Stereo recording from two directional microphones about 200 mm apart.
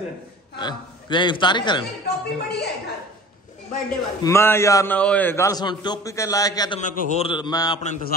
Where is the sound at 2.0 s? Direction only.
55° left (ahead or behind).